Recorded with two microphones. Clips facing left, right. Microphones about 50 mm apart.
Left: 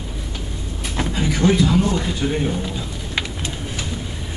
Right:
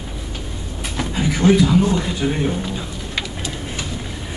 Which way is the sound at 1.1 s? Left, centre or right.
Centre.